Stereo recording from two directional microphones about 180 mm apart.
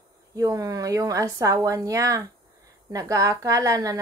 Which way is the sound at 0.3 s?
20° right (ahead or behind).